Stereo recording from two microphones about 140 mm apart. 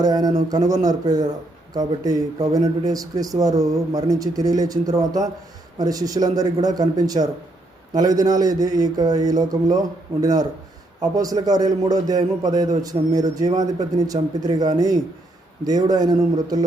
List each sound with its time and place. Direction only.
0.0 s a man's voice: 30° right (ahead or behind)